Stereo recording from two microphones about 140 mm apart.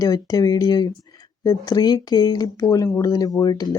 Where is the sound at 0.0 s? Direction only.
25° left (ahead or behind).